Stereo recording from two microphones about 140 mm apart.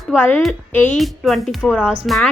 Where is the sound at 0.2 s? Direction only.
10° left (ahead or behind).